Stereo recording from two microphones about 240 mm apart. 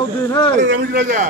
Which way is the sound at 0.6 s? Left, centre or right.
Right.